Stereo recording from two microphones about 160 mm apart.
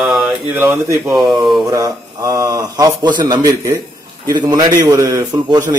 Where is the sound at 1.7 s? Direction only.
20° right (ahead or behind).